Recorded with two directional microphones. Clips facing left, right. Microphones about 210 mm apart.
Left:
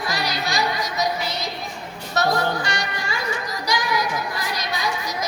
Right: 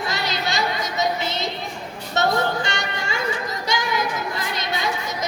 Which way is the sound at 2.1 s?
25° right (ahead or behind).